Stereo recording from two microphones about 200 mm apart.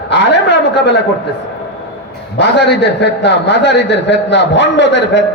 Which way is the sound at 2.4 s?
60° left (ahead or behind).